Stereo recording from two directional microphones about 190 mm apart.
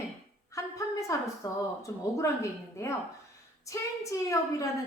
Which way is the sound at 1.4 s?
15° left (ahead or behind).